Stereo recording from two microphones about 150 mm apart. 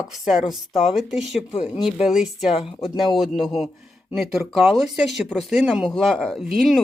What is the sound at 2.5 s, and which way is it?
Speech, 45° left (ahead or behind).